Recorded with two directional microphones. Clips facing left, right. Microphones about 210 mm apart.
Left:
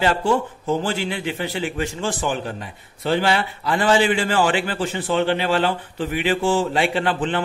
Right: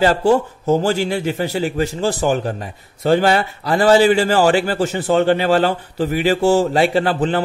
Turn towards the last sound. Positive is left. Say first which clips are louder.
# right 5 dB
turn(degrees=-40)  # may be behind; listen again after turning